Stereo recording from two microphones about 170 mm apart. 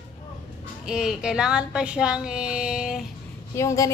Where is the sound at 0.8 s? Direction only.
5° right (ahead or behind).